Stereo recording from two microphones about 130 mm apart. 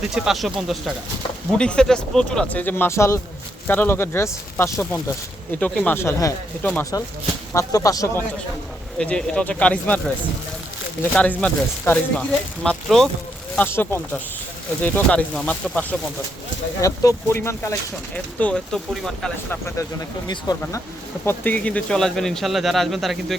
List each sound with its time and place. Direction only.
0.1 s speech: 5° right (ahead or behind); by 6.8 s 15° left (ahead or behind)
7.5 s speech: 25° left (ahead or behind)
9.0 s speech: 5° left (ahead or behind)
11.1 s speech: 10° left (ahead or behind)
13.6 s speech: 20° left (ahead or behind)
16.8 s speech: 25° left (ahead or behind); by 18.8 s 10° left (ahead or behind)
19.5 s speech: 20° left (ahead or behind)
21.2 s speech: 15° left (ahead or behind)